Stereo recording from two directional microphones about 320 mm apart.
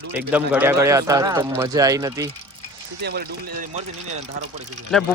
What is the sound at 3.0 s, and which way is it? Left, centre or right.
Speech, right.